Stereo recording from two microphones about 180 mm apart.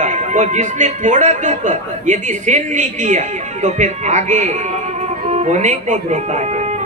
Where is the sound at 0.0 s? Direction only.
40° right (ahead or behind).